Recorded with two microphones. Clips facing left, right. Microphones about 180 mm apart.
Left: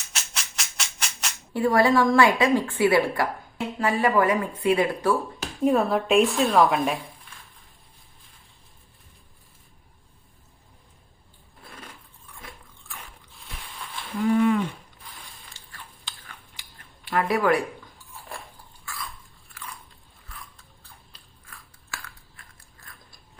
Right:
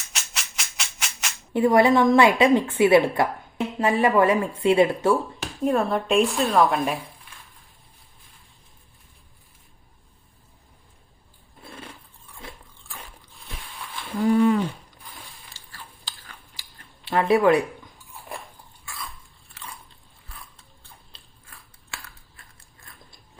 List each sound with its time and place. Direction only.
0.1 s music: centre (ahead or behind)
1.5 s a woman's voice: 20° right (ahead or behind)
5.6 s a woman's voice: centre (ahead or behind)
11.6 s scissors: 25° right (ahead or behind)
12.4 s dog: 30° right (ahead or behind)
14.3 s a sound: 35° right (ahead or behind)
16.1 s chewing: 35° right (ahead or behind)
17.1 s speech: 25° right (ahead or behind)
20.8 s biting: 30° right (ahead or behind)